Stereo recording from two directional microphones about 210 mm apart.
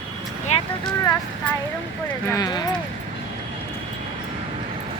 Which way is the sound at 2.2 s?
15° left (ahead or behind).